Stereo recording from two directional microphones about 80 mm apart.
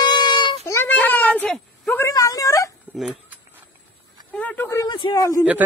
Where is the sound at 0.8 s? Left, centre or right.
Left.